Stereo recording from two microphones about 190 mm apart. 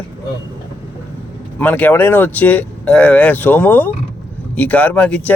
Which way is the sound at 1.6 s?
10° left (ahead or behind).